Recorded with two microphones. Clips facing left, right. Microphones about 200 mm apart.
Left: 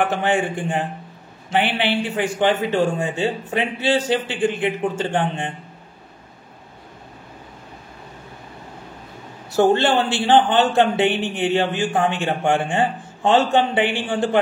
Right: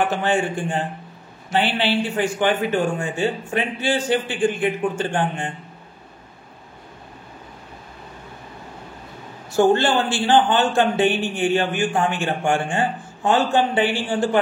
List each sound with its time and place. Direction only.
0.2 s a man's voice: 15° left (ahead or behind)
9.8 s a man's voice: 25° left (ahead or behind)